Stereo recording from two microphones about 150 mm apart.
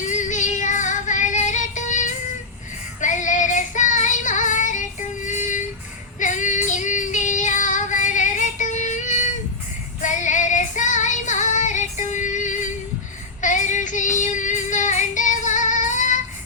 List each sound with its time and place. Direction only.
0.0 s music: 55° left (ahead or behind)
3.0 s child singing: 60° left (ahead or behind)
6.1 s female singing: 55° left (ahead or behind)
13.4 s child singing: 55° left (ahead or behind)